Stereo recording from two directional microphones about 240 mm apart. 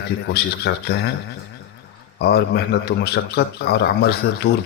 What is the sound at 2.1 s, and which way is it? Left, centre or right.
A man's voice, left.